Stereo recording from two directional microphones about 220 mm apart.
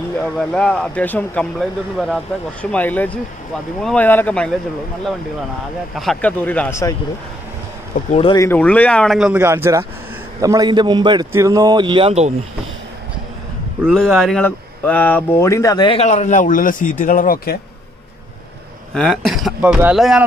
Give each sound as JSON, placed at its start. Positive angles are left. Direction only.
{"t": 0.2, "sound": "speech", "side_deg": 5}
{"t": 5.9, "sound": "speech", "side_deg": 5}
{"t": 8.1, "sound": "speech", "side_deg": 25}
{"t": 8.4, "sound": "a man's voice", "side_deg": 10}
{"t": 13.8, "sound": "speech", "side_deg": 0}
{"t": 18.9, "sound": "speech", "side_deg": 0}